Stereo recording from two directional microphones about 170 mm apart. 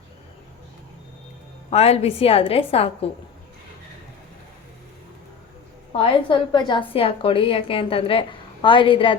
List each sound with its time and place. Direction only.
1.7 s a woman's voice: 40° left (ahead or behind)
5.9 s a woman's voice: 30° left (ahead or behind)